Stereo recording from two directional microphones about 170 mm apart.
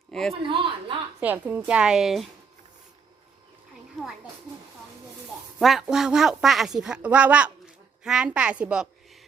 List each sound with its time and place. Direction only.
0.1 s speech: 5° left (ahead or behind)
0.4 s speech: 30° right (ahead or behind)
1.2 s speech: 10° right (ahead or behind)
5.5 s speech: centre (ahead or behind)